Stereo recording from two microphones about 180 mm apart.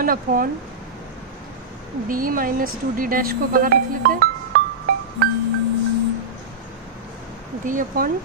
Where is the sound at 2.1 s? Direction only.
50° right (ahead or behind).